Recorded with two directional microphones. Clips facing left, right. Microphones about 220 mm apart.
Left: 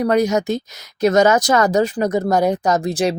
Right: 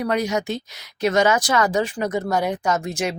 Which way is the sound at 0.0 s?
40° left (ahead or behind).